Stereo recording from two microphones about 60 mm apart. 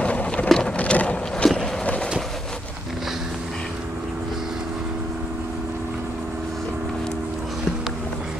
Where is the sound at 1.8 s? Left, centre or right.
Centre.